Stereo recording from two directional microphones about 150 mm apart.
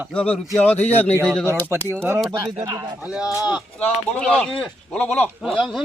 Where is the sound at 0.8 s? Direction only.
45° left (ahead or behind).